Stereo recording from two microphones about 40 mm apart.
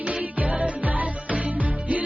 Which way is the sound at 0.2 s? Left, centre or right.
Right.